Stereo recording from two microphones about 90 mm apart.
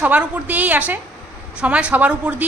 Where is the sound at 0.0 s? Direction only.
20° right (ahead or behind).